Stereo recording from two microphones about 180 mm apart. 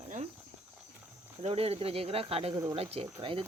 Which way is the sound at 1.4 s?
35° right (ahead or behind).